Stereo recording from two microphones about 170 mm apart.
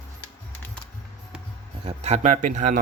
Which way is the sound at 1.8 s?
40° right (ahead or behind).